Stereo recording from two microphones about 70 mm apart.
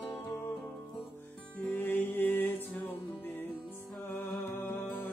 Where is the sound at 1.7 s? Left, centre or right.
Left.